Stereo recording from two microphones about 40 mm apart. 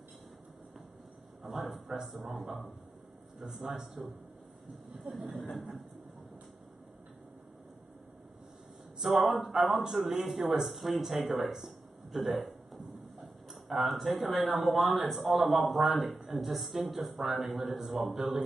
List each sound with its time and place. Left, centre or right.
1.4 s a man's voice: centre
5.1 s speech: right
5.5 s speech: centre
9.0 s speech: centre